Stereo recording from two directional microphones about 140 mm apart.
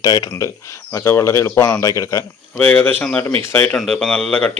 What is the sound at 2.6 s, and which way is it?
Speech, 10° left (ahead or behind).